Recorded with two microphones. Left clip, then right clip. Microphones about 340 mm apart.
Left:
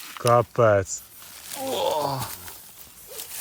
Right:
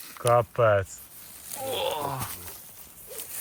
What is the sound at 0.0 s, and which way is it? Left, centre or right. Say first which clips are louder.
Speech: left 3 dB; centre.